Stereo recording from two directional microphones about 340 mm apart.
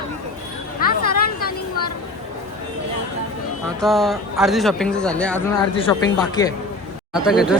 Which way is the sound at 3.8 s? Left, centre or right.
Centre.